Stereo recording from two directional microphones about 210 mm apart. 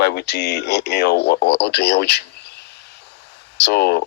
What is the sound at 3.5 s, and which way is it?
Speech, 50° left (ahead or behind).